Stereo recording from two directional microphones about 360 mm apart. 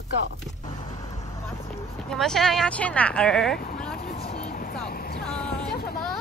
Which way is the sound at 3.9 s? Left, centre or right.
Left.